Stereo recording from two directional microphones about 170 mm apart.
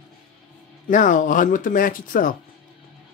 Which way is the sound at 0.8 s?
50° left (ahead or behind).